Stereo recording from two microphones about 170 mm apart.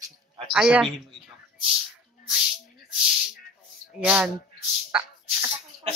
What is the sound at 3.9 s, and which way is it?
Speech, 5° right (ahead or behind).